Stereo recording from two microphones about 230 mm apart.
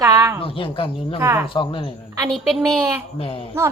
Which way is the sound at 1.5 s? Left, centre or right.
Left.